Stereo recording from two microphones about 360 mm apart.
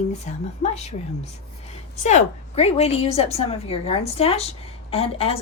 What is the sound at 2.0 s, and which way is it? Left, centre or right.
Speech, centre.